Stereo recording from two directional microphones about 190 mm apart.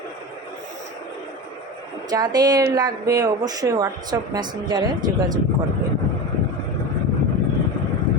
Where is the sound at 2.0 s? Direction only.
20° right (ahead or behind).